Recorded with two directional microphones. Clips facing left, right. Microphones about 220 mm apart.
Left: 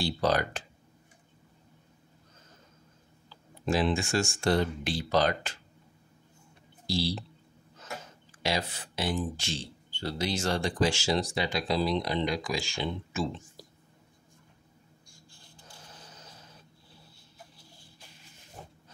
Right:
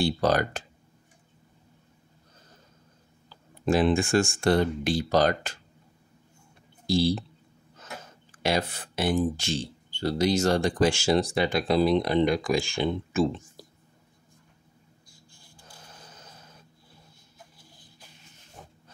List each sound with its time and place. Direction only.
0.0 s speech: 45° right (ahead or behind)
3.3 s speech: 50° right (ahead or behind)
6.9 s speech: 50° right (ahead or behind)
8.4 s speech: 55° right (ahead or behind)
13.6 s whispering: 50° right (ahead or behind)